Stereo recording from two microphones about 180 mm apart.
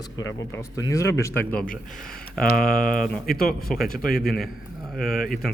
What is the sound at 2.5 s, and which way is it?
Speech, 55° left (ahead or behind).